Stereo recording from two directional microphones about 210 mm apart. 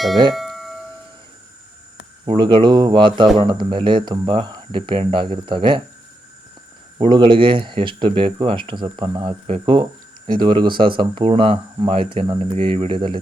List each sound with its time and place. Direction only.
0.3 s doorbell: centre (ahead or behind)
2.2 s speech: 25° right (ahead or behind)
7.0 s speech: 25° right (ahead or behind)